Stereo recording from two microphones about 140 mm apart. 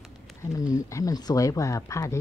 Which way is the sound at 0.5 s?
25° left (ahead or behind).